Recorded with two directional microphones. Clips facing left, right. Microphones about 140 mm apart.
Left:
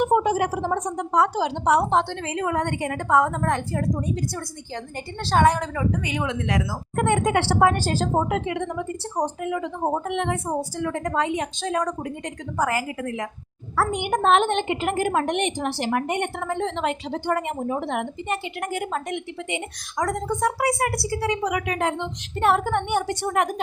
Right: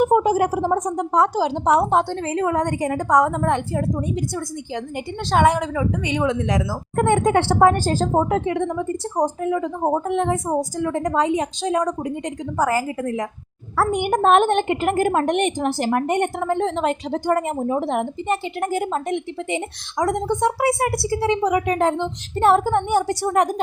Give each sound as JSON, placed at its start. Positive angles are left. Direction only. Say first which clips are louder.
{"t": 0.0, "sound": "a woman's voice", "louder": "right 4 dB", "side_deg": -40}
{"t": 3.2, "sound": "a woman's voice", "louder": "right 4 dB", "side_deg": -15}
{"t": 5.3, "sound": "a woman's voice", "louder": "right 2 dB", "side_deg": -15}
{"t": 6.1, "sound": "a woman's voice", "louder": "right 5 dB", "side_deg": -30}
{"t": 12.7, "sound": "a woman's voice", "louder": "right 5 dB", "side_deg": -35}
{"t": 13.7, "sound": "a woman's voice", "louder": "right 4 dB", "side_deg": -50}
{"t": 20.0, "sound": "a woman's voice", "louder": "right 4 dB", "side_deg": -20}